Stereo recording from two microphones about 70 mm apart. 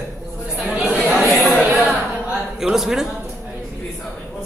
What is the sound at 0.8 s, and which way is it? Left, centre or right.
Chatter, right.